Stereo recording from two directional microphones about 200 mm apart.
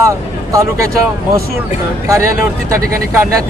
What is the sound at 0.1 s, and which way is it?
Speech, 15° right (ahead or behind).